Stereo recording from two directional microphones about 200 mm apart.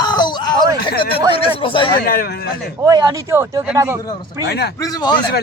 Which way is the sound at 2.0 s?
45° left (ahead or behind).